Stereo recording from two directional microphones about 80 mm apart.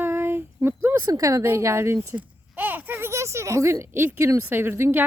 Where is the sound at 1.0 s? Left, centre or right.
Right.